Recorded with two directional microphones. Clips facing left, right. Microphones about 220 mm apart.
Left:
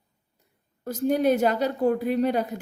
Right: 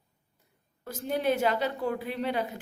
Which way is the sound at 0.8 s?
45° left (ahead or behind).